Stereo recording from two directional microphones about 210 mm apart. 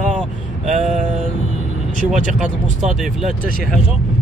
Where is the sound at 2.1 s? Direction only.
35° right (ahead or behind).